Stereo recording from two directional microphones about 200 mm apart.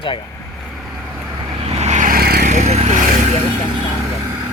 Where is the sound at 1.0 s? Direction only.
10° right (ahead or behind).